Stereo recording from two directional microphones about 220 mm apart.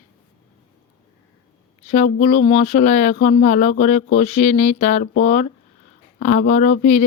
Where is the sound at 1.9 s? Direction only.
35° left (ahead or behind).